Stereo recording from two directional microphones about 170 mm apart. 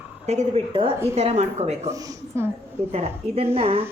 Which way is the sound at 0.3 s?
35° right (ahead or behind).